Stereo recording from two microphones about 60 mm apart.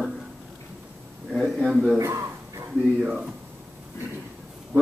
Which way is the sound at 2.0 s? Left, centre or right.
Right.